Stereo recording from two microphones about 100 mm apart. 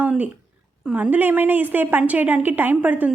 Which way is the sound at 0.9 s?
15° right (ahead or behind).